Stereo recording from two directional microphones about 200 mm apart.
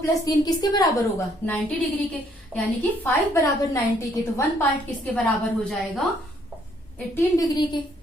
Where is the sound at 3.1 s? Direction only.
15° left (ahead or behind).